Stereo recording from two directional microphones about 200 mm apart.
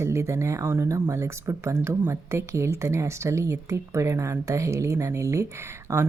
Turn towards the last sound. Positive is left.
turn(degrees=-15)  # may be behind; listen again after turning